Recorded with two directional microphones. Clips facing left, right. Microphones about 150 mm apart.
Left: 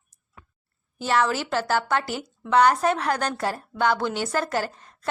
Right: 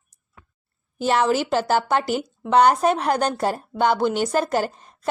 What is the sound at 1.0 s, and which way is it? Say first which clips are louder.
A woman's voice: right 4 dB; 20° right (ahead or behind).